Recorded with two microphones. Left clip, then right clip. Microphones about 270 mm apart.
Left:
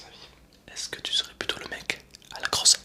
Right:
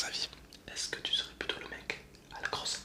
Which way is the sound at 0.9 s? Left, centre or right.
Centre.